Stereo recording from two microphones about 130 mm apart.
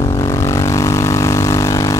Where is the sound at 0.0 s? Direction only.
25° left (ahead or behind).